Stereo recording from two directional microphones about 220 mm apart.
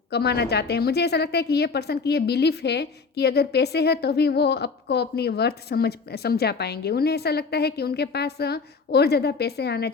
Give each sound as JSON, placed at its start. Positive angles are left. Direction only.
{"t": 0.1, "sound": "a woman's voice", "side_deg": 50}